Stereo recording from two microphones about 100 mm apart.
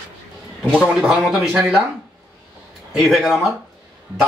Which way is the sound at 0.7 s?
10° right (ahead or behind).